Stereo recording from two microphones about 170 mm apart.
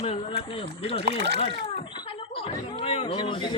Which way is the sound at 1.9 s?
30° left (ahead or behind).